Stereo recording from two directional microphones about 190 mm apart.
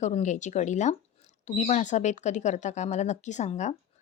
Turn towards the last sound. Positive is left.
turn(degrees=40)  # may be behind; listen again after turning